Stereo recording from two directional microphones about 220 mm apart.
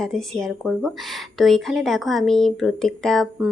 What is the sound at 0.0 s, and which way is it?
Speech, centre (ahead or behind).